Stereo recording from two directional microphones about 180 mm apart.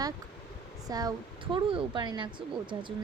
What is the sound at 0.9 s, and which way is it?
Speech, 20° right (ahead or behind).